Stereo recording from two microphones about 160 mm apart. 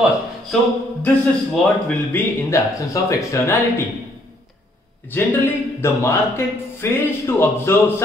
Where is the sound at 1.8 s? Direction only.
15° left (ahead or behind).